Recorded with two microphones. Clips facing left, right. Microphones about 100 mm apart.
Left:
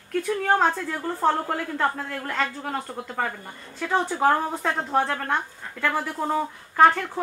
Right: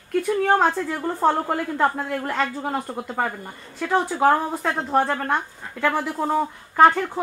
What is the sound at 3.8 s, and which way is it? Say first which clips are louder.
A woman's voice: right 3 dB; 5° right (ahead or behind).